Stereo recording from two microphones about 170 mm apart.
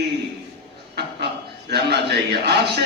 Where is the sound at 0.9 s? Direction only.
75° right (ahead or behind).